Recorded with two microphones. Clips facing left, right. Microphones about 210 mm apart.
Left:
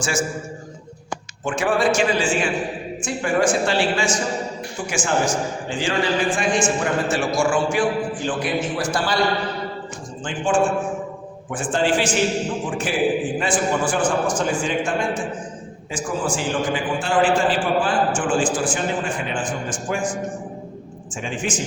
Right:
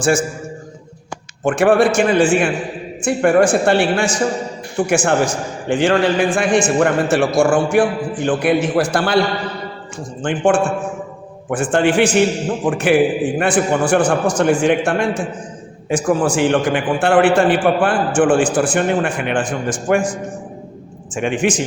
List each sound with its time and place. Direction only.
0.0 s a man's voice: 55° right (ahead or behind)
1.5 s a man's voice: 60° right (ahead or behind)
10.2 s a man's voice: 65° right (ahead or behind)
21.2 s a man's voice: 65° right (ahead or behind)